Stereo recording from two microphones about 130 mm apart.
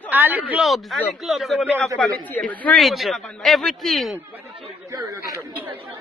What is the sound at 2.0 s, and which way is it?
Speech, 10° left (ahead or behind).